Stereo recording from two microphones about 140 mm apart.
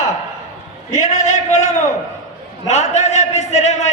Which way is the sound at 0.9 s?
60° left (ahead or behind).